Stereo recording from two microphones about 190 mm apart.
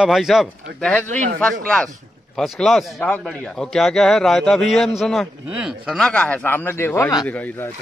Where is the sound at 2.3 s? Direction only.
Centre (ahead or behind).